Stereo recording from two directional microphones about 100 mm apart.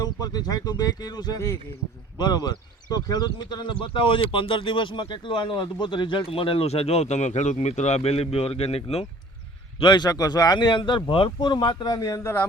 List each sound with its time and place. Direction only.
0.0 s speech: 40° left (ahead or behind); by 9.0 s 90° left
9.8 s speech: 45° left (ahead or behind)